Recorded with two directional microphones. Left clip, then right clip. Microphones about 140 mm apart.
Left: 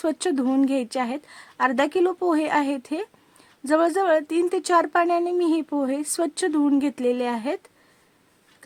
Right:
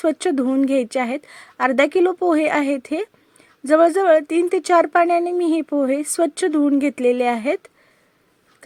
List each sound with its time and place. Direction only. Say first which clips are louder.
0.0 s a woman's voice: right 5 dB; 15° right (ahead or behind)